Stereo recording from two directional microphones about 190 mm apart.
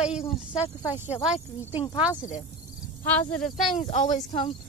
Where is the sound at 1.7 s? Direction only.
25° left (ahead or behind).